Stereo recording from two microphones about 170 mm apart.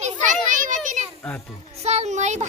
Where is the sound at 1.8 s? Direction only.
40° right (ahead or behind).